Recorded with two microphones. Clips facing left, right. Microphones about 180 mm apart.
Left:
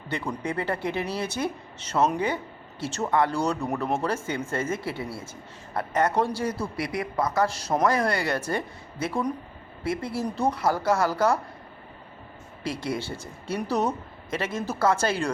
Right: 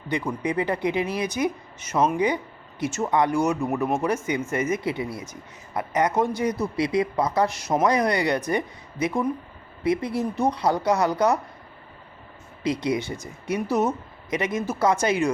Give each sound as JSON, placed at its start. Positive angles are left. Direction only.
{"t": 0.1, "sound": "speech", "side_deg": -15}
{"t": 12.6, "sound": "speech", "side_deg": -20}
{"t": 14.3, "sound": "speech", "side_deg": -15}